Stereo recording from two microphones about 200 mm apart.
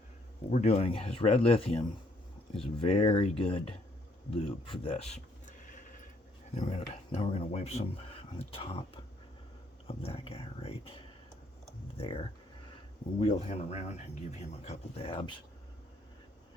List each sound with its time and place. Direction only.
0.5 s speech: 35° left (ahead or behind)
4.4 s a sound: 25° left (ahead or behind)
6.5 s speech: 30° left (ahead or behind)
9.8 s speech: 30° left (ahead or behind)